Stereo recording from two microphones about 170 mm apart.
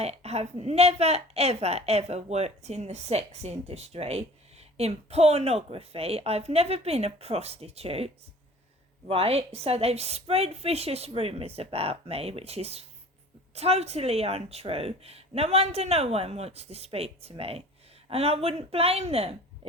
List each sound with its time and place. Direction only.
0.0 s a woman's voice: 40° right (ahead or behind)